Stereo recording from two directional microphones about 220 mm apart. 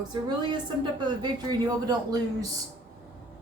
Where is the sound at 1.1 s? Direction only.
20° right (ahead or behind).